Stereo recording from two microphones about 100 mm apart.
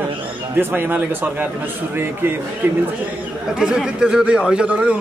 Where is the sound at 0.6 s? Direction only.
20° right (ahead or behind).